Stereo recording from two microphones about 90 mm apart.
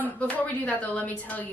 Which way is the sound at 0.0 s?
15° left (ahead or behind).